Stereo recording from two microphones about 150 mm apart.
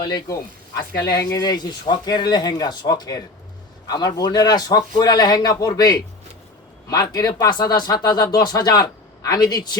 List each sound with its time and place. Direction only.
0.0 s speech: 25° left (ahead or behind)